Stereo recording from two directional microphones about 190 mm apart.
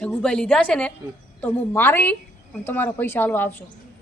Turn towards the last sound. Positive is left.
turn(degrees=10)  # may be behind; listen again after turning